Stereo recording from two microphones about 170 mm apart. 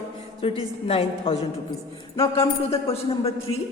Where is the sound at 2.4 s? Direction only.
35° left (ahead or behind).